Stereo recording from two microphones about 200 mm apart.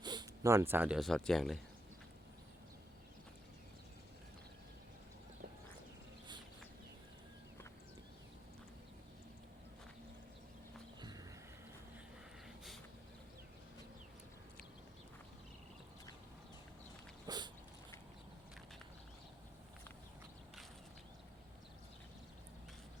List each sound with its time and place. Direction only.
0.0 s speech: 20° right (ahead or behind); by 1.6 s centre (ahead or behind)
11.0 s horse: 20° right (ahead or behind)
17.2 s dog: 20° right (ahead or behind)